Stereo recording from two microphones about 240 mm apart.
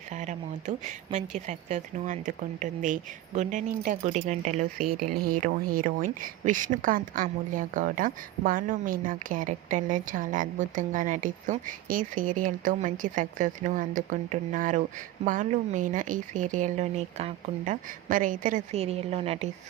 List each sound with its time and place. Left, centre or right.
0.1 s a woman's voice: right